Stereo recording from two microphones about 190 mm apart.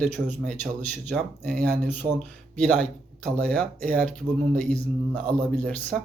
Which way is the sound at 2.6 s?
5° left (ahead or behind).